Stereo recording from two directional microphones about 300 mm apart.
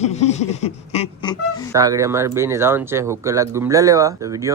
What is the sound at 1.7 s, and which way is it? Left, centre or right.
Speech, centre.